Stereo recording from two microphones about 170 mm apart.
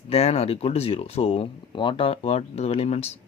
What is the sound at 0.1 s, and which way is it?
Speech, 35° left (ahead or behind).